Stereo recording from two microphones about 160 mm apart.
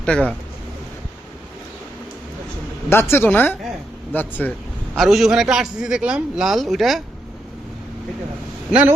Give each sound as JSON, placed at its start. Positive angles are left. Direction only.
{"t": 0.0, "sound": "speech", "side_deg": 5}
{"t": 2.9, "sound": "speech", "side_deg": 15}
{"t": 4.9, "sound": "a man's voice", "side_deg": 0}